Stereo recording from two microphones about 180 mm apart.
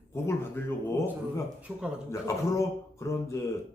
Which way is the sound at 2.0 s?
15° left (ahead or behind).